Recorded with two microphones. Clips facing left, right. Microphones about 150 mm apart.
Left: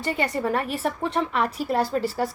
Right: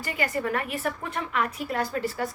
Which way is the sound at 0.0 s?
25° left (ahead or behind).